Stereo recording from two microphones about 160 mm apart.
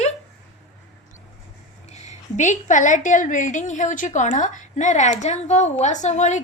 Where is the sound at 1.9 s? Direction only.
50° left (ahead or behind).